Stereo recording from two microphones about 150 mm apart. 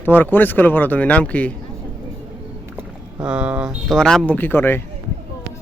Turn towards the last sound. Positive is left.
turn(degrees=15)  # may be behind; listen again after turning